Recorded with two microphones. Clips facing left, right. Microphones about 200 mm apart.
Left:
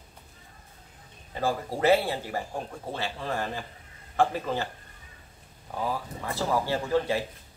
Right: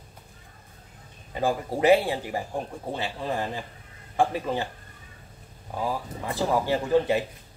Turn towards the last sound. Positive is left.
turn(degrees=-15)  # may be behind; listen again after turning